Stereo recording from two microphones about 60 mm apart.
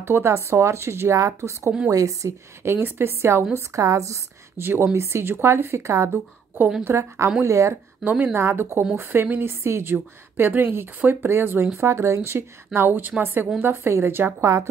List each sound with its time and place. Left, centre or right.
0.0 s speech: right
1.9 s a woman's voice: right
2.6 s speech: right
3.5 s a woman's voice: right
4.6 s speech: right
6.0 s a woman's voice: right
6.8 s speech: right
8.0 s a woman's voice: right
8.4 s speech: right
9.9 s speech: right
11.8 s speech: right
14.4 s a woman's voice: right